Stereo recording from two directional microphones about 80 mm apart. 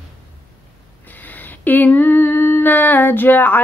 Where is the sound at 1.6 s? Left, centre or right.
Left.